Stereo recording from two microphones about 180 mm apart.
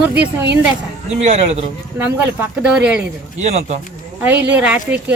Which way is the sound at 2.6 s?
5° right (ahead or behind).